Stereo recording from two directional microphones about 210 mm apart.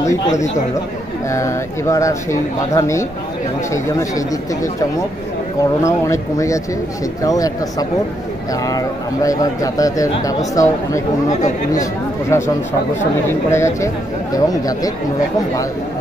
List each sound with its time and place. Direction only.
1.3 s a man's voice: 15° left (ahead or behind)
5.8 s a man's voice: 15° left (ahead or behind)
8.6 s a man's voice: 15° left (ahead or behind)
11.2 s speech: 35° left (ahead or behind)
11.8 s a man's voice: 15° left (ahead or behind)